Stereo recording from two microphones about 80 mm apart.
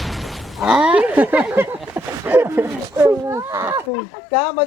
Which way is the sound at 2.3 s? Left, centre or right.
Right.